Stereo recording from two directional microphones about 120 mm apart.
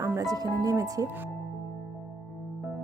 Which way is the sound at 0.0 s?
25° right (ahead or behind).